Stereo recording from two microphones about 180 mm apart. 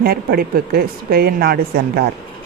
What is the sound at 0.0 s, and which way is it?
Speech, 60° right (ahead or behind).